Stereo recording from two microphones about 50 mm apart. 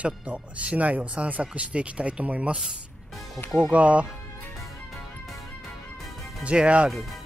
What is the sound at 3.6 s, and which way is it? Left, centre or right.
Speech, right.